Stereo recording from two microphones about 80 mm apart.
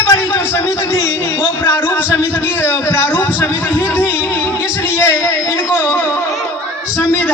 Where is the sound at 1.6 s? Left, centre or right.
Left.